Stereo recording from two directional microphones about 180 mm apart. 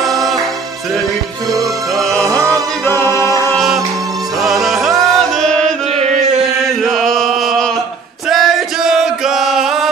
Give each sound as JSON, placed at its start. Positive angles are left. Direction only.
{"t": 0.0, "sound": "music", "side_deg": 0}
{"t": 2.0, "sound": "music", "side_deg": 0}
{"t": 2.2, "sound": "music", "side_deg": -15}
{"t": 2.8, "sound": "a capella", "side_deg": 15}
{"t": 3.5, "sound": "music", "side_deg": 0}
{"t": 6.1, "sound": "chant", "side_deg": 0}